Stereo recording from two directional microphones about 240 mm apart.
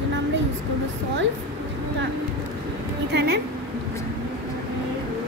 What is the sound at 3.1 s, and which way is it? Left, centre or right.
Speech, right.